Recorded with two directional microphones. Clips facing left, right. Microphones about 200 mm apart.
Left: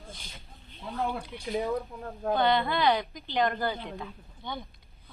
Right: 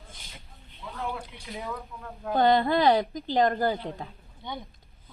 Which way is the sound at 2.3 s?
40° right (ahead or behind).